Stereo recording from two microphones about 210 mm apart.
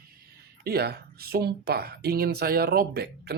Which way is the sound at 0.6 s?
50° right (ahead or behind).